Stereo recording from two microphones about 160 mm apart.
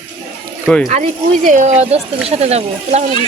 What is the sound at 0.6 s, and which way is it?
Speech, centre (ahead or behind).